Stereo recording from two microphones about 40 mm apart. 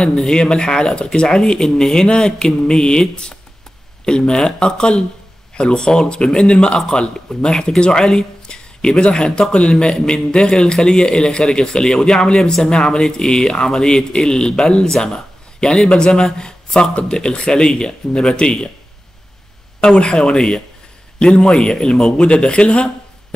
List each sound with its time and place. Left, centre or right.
0.0 s a man's voice: centre
4.0 s speech: centre
19.8 s a man's voice: left